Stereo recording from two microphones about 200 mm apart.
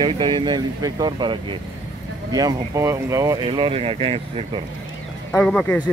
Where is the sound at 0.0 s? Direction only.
20° right (ahead or behind).